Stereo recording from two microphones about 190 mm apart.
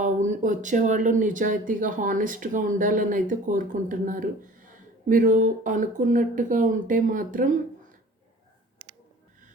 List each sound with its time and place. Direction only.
0.0 s speech: 40° right (ahead or behind)